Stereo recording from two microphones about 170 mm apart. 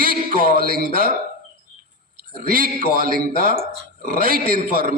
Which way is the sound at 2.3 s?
60° right (ahead or behind).